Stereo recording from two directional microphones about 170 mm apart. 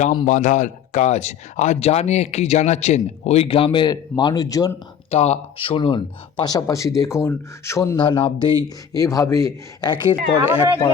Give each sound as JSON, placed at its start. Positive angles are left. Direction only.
{"t": 0.3, "sound": "speech", "side_deg": 50}
{"t": 5.1, "sound": "speech", "side_deg": 40}
{"t": 7.9, "sound": "speech", "side_deg": 30}